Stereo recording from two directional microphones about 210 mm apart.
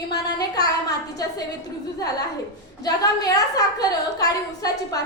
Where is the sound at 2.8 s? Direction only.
15° left (ahead or behind).